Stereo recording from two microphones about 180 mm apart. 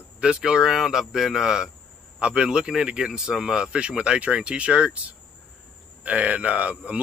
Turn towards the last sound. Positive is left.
turn(degrees=-10)  # may be behind; listen again after turning